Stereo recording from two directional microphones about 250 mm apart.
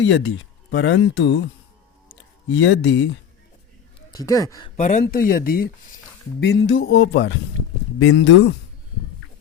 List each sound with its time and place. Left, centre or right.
0.7 s music: left
2.5 s music: left
4.1 s speech: centre
4.8 s speech: left
6.4 s music: left